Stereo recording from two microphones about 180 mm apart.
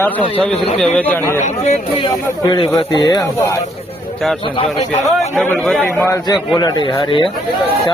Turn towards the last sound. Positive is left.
turn(degrees=30)  # may be behind; listen again after turning